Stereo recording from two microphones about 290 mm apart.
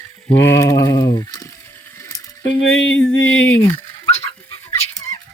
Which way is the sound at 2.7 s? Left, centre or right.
Left.